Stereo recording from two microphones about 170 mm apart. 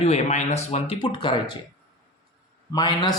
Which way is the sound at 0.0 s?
40° left (ahead or behind).